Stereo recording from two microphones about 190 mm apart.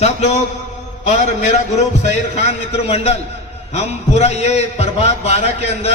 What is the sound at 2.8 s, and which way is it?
A man's voice, 30° left (ahead or behind).